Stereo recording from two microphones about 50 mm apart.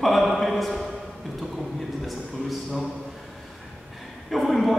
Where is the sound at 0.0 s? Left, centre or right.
Centre.